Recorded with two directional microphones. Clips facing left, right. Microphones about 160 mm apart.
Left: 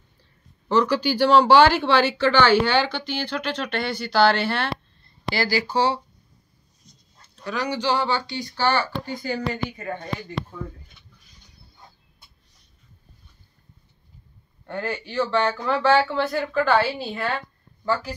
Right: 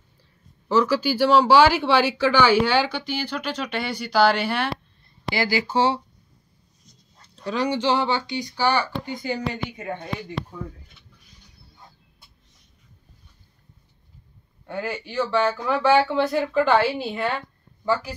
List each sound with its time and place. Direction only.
0.7 s speech: 5° right (ahead or behind); by 5.9 s 25° right (ahead or behind)
7.2 s speech: 25° right (ahead or behind)
14.7 s speech: 10° right (ahead or behind)